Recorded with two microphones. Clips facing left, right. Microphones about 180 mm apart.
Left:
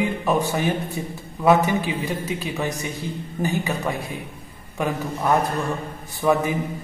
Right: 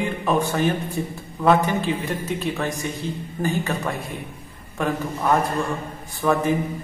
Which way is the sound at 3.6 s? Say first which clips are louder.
Left 1 dB; centre (ahead or behind).